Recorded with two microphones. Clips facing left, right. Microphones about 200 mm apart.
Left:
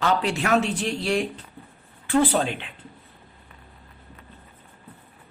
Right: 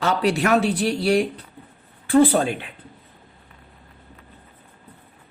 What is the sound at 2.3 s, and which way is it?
Speech, 50° right (ahead or behind).